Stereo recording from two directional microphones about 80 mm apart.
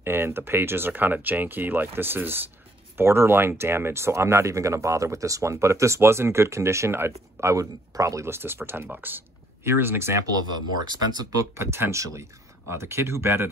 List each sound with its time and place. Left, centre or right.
0.0 s speech: right
10.9 s speech: right
11.5 s speech: right